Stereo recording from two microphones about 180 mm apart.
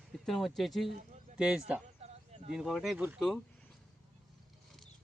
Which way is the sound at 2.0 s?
35° right (ahead or behind).